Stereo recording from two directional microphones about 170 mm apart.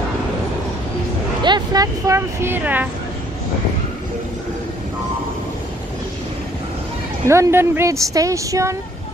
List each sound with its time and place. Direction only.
1.4 s speech: 25° right (ahead or behind)
7.2 s speech: 15° right (ahead or behind)